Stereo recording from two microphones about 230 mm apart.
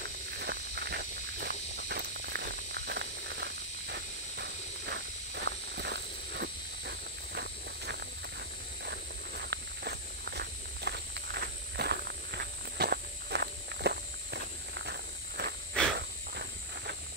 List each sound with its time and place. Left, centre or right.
0.4 s snake: right
9.4 s walk: right